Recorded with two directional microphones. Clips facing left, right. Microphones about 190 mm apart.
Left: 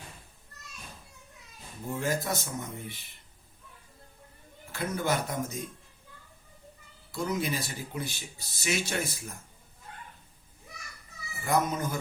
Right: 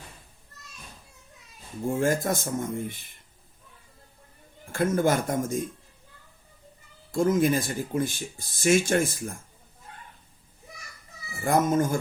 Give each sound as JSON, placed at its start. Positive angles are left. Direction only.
{"t": 1.9, "sound": "speech", "side_deg": -50}
{"t": 4.7, "sound": "speech", "side_deg": -50}
{"t": 7.1, "sound": "speech", "side_deg": -50}
{"t": 11.3, "sound": "speech", "side_deg": -50}